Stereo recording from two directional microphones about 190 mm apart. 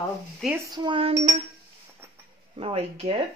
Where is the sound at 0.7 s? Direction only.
25° right (ahead or behind).